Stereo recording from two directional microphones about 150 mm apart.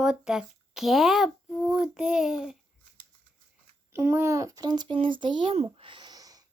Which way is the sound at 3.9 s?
15° right (ahead or behind).